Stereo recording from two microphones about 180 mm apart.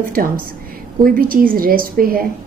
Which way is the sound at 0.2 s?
55° right (ahead or behind).